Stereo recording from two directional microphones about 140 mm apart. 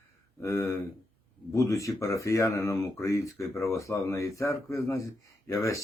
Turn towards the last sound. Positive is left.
turn(degrees=20)  # may be behind; listen again after turning